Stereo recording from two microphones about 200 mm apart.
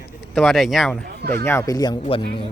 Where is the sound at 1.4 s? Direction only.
15° left (ahead or behind).